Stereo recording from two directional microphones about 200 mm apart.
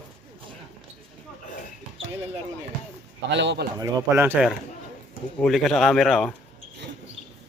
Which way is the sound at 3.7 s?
15° right (ahead or behind).